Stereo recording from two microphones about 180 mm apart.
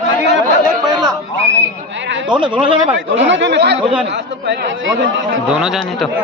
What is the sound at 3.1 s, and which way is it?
Speech, 90° right.